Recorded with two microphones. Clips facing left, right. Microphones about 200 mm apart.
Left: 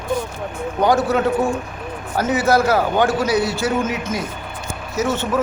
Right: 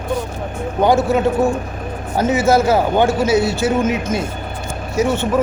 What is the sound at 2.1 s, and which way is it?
A man's voice, 20° right (ahead or behind).